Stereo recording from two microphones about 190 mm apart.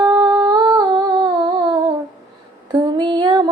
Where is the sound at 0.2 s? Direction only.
20° right (ahead or behind).